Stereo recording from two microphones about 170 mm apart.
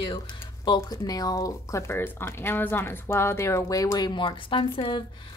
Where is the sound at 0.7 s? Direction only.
20° left (ahead or behind).